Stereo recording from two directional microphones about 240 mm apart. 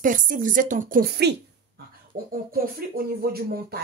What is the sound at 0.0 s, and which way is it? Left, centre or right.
A woman's voice, right.